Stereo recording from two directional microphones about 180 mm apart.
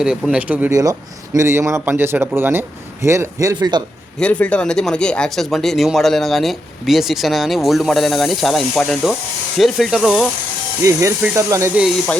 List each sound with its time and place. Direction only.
0.0 s a man's voice: 5° right (ahead or behind)
0.8 s a man's voice: 20° right (ahead or behind)
4.2 s speech: 5° left (ahead or behind)
10.8 s a man's voice: 20° right (ahead or behind)
11.8 s speech: 5° left (ahead or behind)